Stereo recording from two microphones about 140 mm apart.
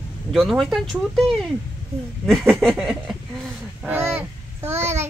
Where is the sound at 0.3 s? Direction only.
Centre (ahead or behind).